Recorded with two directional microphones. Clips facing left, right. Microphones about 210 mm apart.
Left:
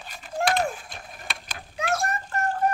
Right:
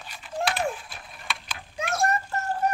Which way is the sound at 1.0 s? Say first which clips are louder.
Right 1 dB; 45° left (ahead or behind).